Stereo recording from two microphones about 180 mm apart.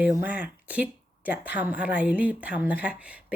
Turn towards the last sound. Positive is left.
turn(degrees=-5)  # may be behind; listen again after turning